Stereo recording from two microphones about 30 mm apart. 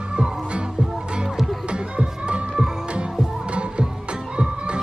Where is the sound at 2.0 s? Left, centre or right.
Right.